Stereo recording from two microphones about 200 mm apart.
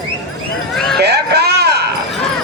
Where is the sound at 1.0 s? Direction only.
55° right (ahead or behind).